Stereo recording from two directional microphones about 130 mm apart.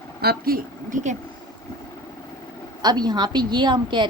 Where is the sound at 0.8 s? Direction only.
75° right (ahead or behind).